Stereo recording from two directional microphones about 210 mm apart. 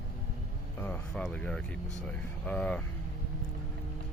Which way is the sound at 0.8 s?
5° left (ahead or behind).